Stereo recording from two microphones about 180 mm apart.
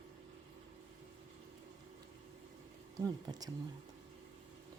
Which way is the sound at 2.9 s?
20° right (ahead or behind).